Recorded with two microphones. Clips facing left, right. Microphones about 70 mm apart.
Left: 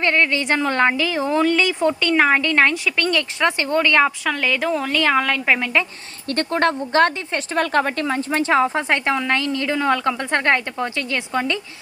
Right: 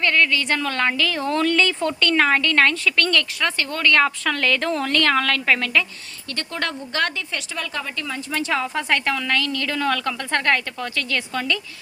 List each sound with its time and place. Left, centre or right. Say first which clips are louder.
0.0 s a woman's voice: left 1 dB; left
6.2 s speech: left 9 dB; left
7.5 s speech: left 12 dB; left